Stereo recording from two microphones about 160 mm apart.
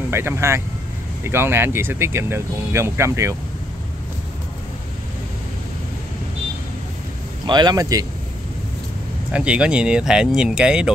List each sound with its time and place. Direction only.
0.1 s speech: 15° right (ahead or behind)
7.4 s speech: 25° right (ahead or behind)
9.3 s speech: 5° right (ahead or behind)